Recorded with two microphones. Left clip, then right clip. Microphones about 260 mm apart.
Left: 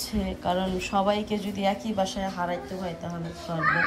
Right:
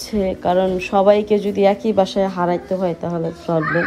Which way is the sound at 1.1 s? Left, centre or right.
Left.